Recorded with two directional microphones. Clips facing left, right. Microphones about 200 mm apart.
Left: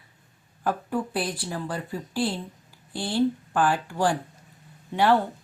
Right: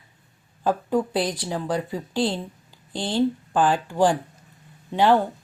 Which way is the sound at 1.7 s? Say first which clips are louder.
Right 5 dB; 90° right.